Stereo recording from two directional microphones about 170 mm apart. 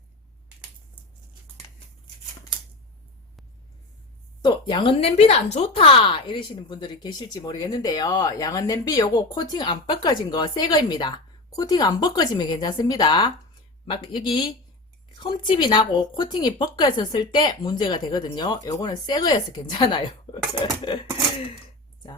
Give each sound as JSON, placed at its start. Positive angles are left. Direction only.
{"t": 4.4, "sound": "speech", "side_deg": 25}